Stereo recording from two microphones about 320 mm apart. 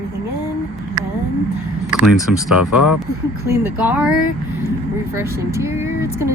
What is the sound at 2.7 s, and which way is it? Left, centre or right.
Speech, left.